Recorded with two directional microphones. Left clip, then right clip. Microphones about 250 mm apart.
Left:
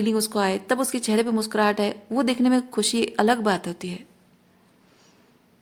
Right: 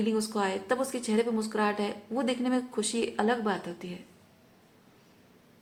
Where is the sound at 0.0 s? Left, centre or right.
Left.